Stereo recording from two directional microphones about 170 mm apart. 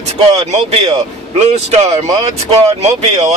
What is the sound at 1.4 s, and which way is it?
Speech, 40° right (ahead or behind).